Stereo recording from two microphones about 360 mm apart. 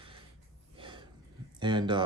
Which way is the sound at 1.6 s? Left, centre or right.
Centre.